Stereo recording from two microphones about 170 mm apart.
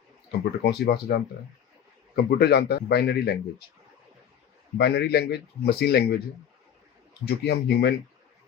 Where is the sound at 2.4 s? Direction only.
70° left (ahead or behind).